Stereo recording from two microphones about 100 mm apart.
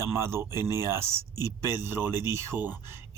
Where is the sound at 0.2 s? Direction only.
25° right (ahead or behind).